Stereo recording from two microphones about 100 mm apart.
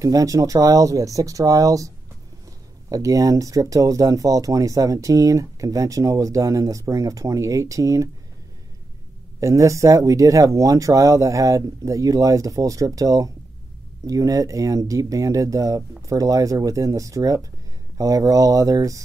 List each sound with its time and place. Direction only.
0.0 s speech: 35° right (ahead or behind)
2.9 s speech: 35° right (ahead or behind)
9.4 s speech: 30° right (ahead or behind)